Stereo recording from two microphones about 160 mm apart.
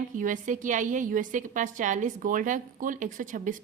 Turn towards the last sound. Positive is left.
turn(degrees=-55)  # may be behind; listen again after turning